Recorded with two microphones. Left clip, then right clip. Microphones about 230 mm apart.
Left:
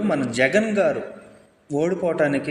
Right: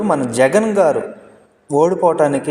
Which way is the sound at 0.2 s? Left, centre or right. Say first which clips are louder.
Right 6 dB; right.